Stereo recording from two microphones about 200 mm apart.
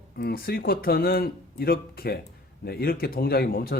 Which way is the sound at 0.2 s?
50° left (ahead or behind).